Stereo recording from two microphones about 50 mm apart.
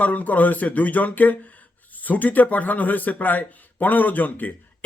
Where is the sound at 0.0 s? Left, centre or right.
Left.